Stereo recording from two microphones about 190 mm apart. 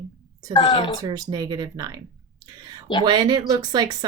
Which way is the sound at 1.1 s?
20° right (ahead or behind).